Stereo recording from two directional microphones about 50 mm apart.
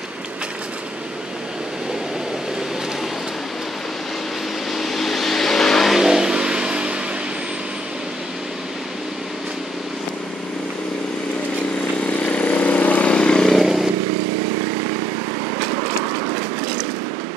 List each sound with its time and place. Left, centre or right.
4.7 s vehicle: centre
5.9 s vehicle: centre
12.2 s vehicle: left
13.1 s vehicle: centre
13.6 s vehicle: centre